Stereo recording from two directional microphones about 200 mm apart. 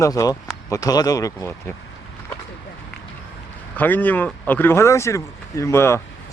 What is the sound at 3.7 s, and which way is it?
Speech, 10° left (ahead or behind).